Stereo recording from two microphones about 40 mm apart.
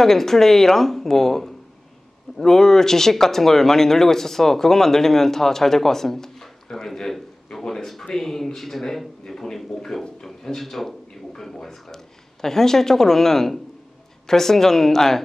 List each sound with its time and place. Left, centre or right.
0.0 s speech: centre